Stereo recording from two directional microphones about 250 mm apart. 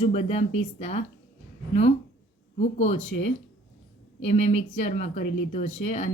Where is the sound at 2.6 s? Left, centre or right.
Left.